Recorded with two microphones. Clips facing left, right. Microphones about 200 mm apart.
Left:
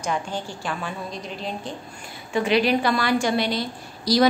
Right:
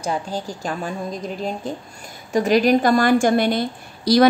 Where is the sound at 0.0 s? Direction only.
35° right (ahead or behind).